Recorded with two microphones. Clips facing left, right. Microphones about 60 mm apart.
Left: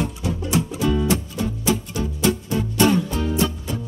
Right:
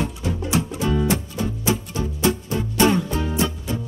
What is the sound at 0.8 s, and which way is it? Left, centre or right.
Music, right.